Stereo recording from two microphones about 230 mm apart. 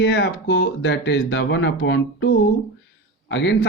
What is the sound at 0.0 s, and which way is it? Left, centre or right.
Speech, left.